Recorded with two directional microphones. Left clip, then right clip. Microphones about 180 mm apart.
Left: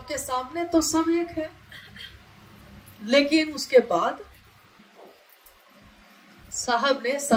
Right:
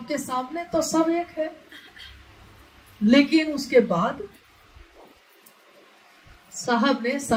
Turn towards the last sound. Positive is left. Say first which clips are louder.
# even
turn(degrees=45)  # may be behind; listen again after turning